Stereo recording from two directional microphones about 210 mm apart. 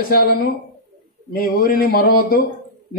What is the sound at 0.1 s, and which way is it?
Speech, 45° left (ahead or behind).